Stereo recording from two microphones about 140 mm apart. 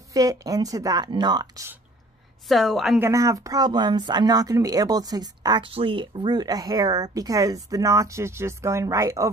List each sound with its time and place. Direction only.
0.1 s speech: 25° right (ahead or behind)
2.4 s a woman's voice: centre (ahead or behind)
3.0 s speech: 20° right (ahead or behind)